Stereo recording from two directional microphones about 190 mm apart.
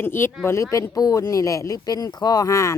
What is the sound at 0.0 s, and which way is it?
Speech, 10° left (ahead or behind).